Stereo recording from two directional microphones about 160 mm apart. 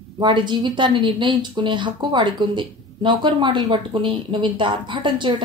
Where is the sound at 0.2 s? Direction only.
30° right (ahead or behind).